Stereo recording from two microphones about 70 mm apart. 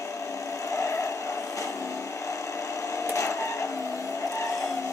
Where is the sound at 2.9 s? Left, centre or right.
Left.